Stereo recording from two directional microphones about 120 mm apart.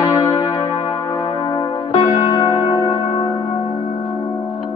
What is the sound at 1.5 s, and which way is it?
Music, 40° left (ahead or behind).